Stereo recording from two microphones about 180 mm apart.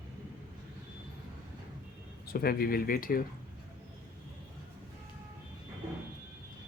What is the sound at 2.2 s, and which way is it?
Speech, 60° left (ahead or behind).